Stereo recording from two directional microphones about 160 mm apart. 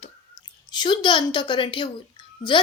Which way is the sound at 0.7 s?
30° left (ahead or behind).